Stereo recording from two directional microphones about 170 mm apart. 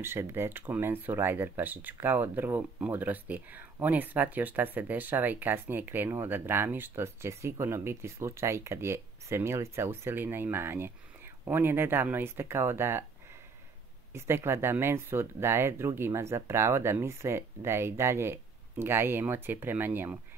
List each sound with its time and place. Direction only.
0.0 s speech: 15° right (ahead or behind)
14.1 s speech: 15° right (ahead or behind)